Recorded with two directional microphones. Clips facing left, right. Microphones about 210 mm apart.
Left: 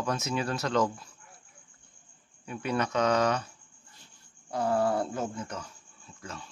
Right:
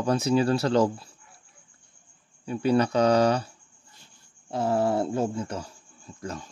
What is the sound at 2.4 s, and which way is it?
Speech, 30° right (ahead or behind).